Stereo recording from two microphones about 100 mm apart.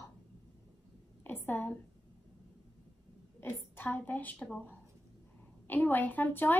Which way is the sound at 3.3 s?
20° left (ahead or behind).